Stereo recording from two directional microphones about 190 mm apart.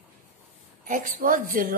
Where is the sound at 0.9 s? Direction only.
45° right (ahead or behind).